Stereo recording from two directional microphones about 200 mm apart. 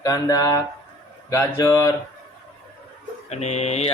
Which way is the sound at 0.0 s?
20° left (ahead or behind).